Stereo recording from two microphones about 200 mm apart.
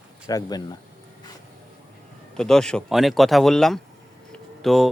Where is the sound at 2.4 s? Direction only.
5° left (ahead or behind).